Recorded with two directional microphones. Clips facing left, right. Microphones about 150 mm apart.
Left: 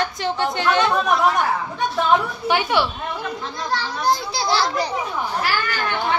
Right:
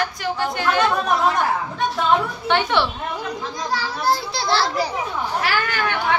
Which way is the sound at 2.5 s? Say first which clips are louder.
Even; 5° left (ahead or behind).